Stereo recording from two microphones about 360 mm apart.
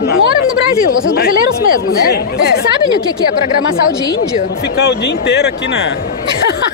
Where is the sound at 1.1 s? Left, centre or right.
Left.